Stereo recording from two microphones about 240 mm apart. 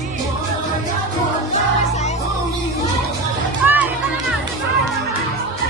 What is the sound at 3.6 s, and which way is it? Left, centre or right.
Music, centre.